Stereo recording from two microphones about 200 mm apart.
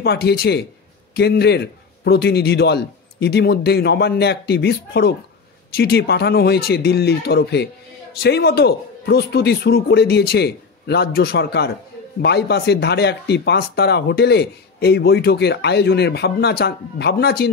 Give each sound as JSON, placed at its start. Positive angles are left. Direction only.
{"t": 0.0, "sound": "a man's voice", "side_deg": 55}